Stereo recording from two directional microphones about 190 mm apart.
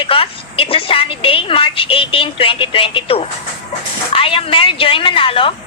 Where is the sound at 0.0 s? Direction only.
30° left (ahead or behind).